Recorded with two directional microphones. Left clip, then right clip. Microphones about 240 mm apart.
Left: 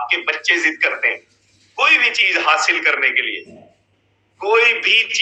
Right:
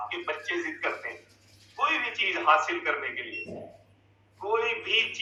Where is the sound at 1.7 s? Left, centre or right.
Left.